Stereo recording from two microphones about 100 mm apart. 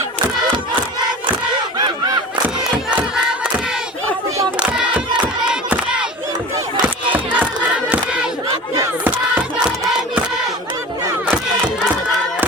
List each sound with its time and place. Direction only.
4.8 s a sound: 10° right (ahead or behind)
6.8 s battle cry: 10° right (ahead or behind)
9.0 s crowd: 20° right (ahead or behind)